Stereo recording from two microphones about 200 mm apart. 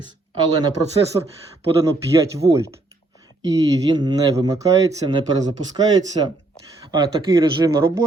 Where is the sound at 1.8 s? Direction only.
15° right (ahead or behind).